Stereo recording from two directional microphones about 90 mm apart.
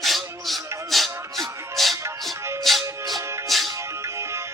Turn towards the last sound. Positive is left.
turn(degrees=-30)  # may be behind; listen again after turning